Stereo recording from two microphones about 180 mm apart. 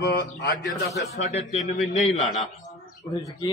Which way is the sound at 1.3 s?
40° left (ahead or behind).